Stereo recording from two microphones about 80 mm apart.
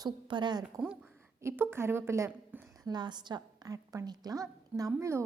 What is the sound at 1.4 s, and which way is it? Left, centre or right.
Speech, right.